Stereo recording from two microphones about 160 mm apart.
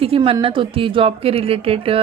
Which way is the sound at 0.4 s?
35° right (ahead or behind).